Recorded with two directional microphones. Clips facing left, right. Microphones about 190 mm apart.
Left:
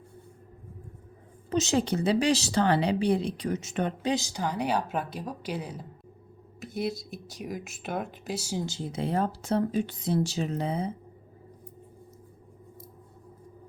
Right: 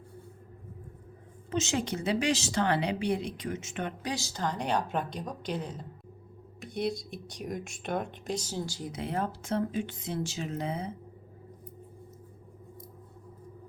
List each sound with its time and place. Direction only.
1.5 s speech: 35° left (ahead or behind)
4.0 s a woman's voice: 20° left (ahead or behind)
8.6 s speech: 25° left (ahead or behind)